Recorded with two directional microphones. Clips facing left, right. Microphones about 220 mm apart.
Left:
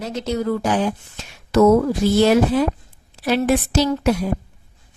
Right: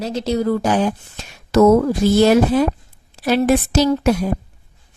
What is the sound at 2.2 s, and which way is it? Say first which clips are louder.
Speech: right 2 dB; 45° right (ahead or behind).